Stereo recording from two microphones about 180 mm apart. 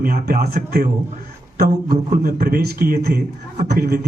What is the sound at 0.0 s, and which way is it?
Speech, 50° right (ahead or behind).